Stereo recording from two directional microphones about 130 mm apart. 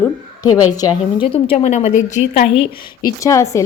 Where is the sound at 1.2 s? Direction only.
45° left (ahead or behind).